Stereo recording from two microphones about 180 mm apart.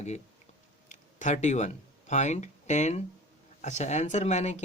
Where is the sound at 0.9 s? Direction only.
40° left (ahead or behind).